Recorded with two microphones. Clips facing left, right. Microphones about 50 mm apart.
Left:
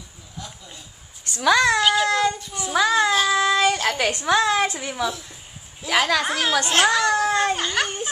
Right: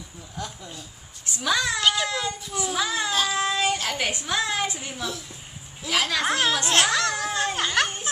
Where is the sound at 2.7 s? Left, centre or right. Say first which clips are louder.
Left 9 dB; left.